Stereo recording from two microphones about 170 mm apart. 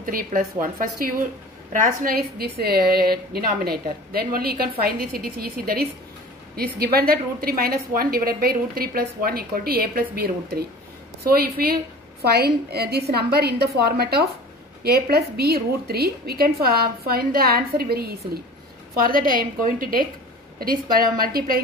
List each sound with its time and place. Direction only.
0.0 s a woman's voice: 55° right (ahead or behind)